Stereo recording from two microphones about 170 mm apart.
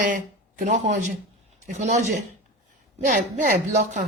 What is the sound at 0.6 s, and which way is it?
Speech, 45° right (ahead or behind).